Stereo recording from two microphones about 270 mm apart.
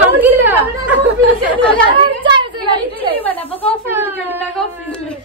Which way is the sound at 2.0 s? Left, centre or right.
Centre.